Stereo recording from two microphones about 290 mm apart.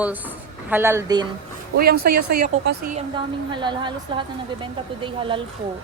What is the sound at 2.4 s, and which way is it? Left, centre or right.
Speech, right.